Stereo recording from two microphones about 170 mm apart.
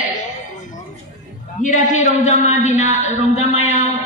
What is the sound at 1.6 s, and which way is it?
A man's voice, 45° left (ahead or behind).